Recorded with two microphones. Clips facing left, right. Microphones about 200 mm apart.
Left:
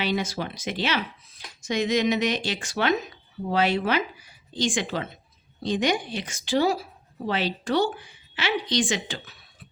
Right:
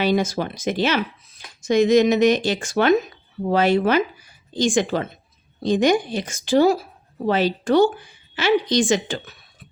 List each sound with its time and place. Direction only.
0.0 s a woman's voice: 45° right (ahead or behind)